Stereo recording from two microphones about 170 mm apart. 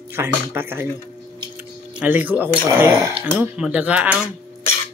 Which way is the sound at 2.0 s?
10° right (ahead or behind).